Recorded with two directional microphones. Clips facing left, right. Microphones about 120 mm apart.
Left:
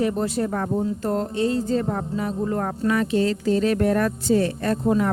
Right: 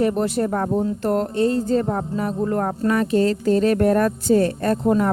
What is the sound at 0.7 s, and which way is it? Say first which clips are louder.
Speech: right 3 dB; 70° right (ahead or behind).